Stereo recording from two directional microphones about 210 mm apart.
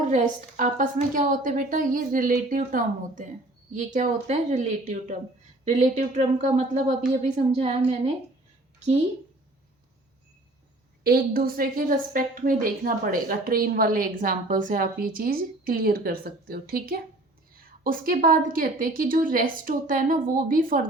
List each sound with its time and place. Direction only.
0.1 s a woman's voice: 35° right (ahead or behind)
11.0 s a woman's voice: 45° right (ahead or behind)